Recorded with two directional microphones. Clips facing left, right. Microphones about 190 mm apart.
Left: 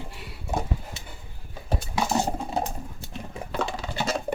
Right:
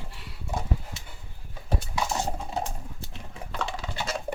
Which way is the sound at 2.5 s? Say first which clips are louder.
Left 3 dB; 40° left (ahead or behind).